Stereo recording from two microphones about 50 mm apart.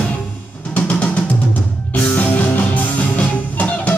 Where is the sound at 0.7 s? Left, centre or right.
Left.